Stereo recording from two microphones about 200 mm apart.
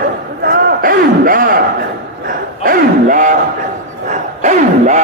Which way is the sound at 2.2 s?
45° right (ahead or behind).